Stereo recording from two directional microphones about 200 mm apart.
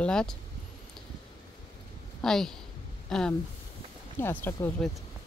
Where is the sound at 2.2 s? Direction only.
Centre (ahead or behind).